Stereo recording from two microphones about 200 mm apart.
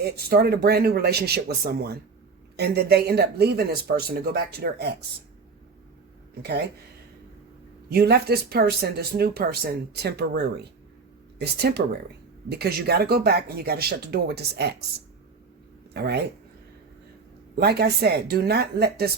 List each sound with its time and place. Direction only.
0.0 s speech: 50° right (ahead or behind)
6.4 s speech: 55° right (ahead or behind)
7.9 s speech: 50° right (ahead or behind)
15.9 s speech: 55° right (ahead or behind)
17.5 s speech: 55° right (ahead or behind)